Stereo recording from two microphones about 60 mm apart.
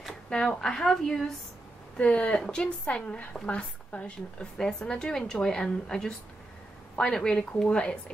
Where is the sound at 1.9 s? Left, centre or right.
Left.